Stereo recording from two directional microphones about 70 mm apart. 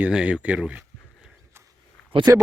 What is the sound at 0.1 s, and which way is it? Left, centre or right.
Speech, centre.